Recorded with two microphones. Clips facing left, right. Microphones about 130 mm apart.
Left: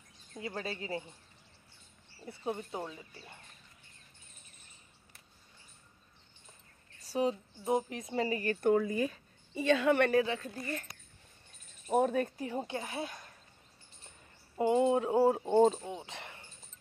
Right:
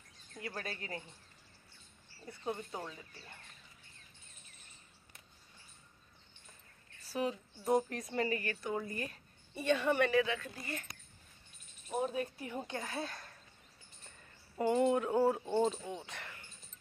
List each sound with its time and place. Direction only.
0.3 s speech: 25° left (ahead or behind)
2.2 s speech: 20° left (ahead or behind)
7.1 s speech: 30° left (ahead or behind)
7.6 s speech: 20° left (ahead or behind)
8.5 s speech: 55° left (ahead or behind)
9.5 s a woman's voice: 90° left
10.1 s speech: 30° left (ahead or behind)
11.9 s speech: 50° left (ahead or behind)
12.4 s speech: 25° left (ahead or behind)
14.6 s speech: 20° left (ahead or behind)
15.5 s speech: 45° left (ahead or behind)
15.8 s speech: 20° left (ahead or behind)